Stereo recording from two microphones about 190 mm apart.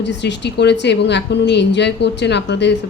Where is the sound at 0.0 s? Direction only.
65° left (ahead or behind).